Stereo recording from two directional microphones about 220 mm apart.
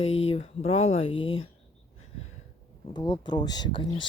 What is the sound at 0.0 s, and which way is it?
Speech, 25° left (ahead or behind).